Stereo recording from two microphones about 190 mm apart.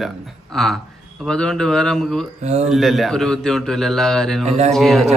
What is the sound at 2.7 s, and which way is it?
A man's voice, centre (ahead or behind).